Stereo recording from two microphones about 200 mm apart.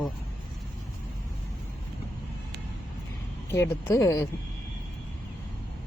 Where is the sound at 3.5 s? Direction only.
15° left (ahead or behind).